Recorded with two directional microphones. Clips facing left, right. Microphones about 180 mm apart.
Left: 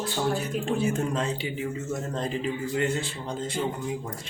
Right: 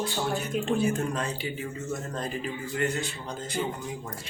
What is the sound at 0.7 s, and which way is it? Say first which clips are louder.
A man's voice: left 2 dB; 25° left (ahead or behind).